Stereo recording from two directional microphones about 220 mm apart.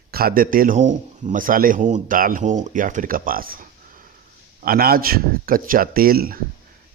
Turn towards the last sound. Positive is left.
turn(degrees=-40)  # may be behind; listen again after turning